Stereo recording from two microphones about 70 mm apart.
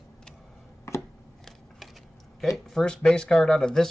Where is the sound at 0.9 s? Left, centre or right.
Left.